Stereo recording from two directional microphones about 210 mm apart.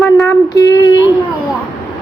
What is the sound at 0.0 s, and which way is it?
Child singing, 15° left (ahead or behind).